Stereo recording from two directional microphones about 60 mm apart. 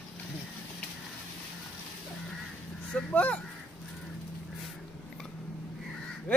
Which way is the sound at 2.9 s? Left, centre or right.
Centre.